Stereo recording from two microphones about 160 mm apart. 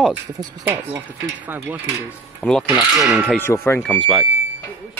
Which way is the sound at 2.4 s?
Centre (ahead or behind).